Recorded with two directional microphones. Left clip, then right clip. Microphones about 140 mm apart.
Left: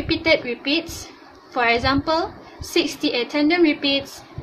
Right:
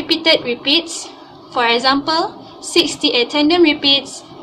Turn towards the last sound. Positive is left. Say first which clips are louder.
# right 6 dB
turn(degrees=90)